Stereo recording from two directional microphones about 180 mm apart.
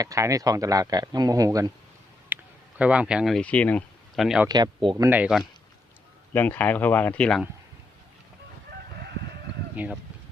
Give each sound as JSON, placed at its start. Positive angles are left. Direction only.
{"t": 0.0, "sound": "speech", "side_deg": -20}
{"t": 2.3, "sound": "speech", "side_deg": -10}
{"t": 4.4, "sound": "speech", "side_deg": -20}
{"t": 5.0, "sound": "speech", "side_deg": -10}
{"t": 6.3, "sound": "speech", "side_deg": 10}
{"t": 9.7, "sound": "speech", "side_deg": -10}